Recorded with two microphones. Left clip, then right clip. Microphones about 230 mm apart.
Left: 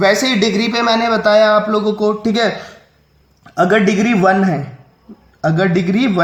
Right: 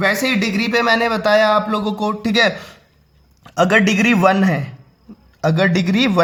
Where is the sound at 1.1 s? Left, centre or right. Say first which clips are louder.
Left 3 dB; right.